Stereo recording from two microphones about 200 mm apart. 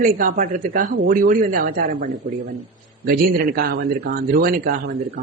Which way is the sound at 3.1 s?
50° right (ahead or behind).